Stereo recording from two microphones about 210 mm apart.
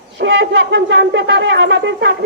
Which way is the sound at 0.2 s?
60° right (ahead or behind).